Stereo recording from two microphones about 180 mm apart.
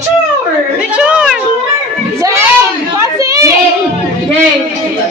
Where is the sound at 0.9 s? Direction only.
5° right (ahead or behind).